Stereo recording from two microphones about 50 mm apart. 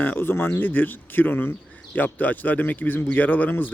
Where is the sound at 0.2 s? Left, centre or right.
Left.